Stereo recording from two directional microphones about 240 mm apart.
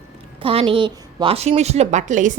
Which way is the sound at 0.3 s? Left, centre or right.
Right.